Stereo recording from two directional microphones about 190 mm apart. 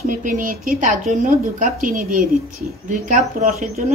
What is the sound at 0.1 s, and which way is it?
A woman's voice, 45° right (ahead or behind).